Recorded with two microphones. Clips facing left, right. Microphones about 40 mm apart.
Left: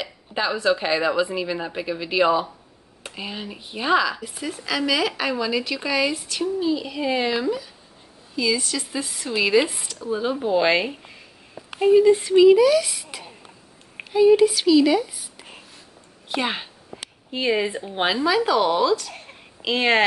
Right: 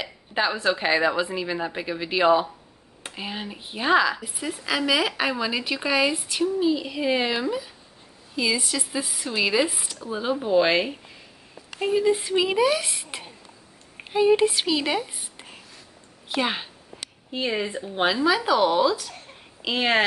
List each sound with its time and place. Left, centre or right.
0.0 s a woman's voice: centre
3.0 s a sound: centre
3.5 s a woman's voice: centre
12.4 s speech: centre
16.3 s speech: centre
17.4 s speech: centre
18.2 s speech: centre